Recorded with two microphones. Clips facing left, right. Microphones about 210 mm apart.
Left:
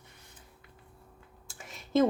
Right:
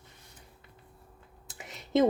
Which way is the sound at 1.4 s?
20° right (ahead or behind).